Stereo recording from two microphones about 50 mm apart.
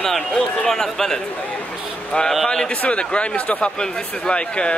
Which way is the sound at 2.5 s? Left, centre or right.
Centre.